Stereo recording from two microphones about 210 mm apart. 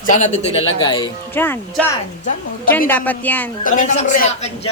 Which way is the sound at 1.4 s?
10° left (ahead or behind).